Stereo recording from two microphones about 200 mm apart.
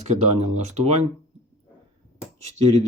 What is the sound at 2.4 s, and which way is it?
Speech, 35° right (ahead or behind).